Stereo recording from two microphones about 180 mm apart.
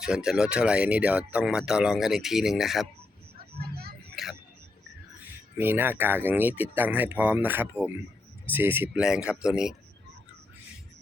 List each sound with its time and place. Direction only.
0.0 s speech: 5° right (ahead or behind)
3.6 s a sound: 60° right (ahead or behind)
5.5 s speech: 10° right (ahead or behind)